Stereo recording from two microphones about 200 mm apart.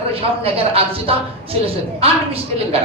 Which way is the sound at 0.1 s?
30° right (ahead or behind).